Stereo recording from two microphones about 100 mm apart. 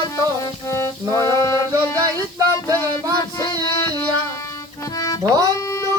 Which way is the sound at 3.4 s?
30° left (ahead or behind).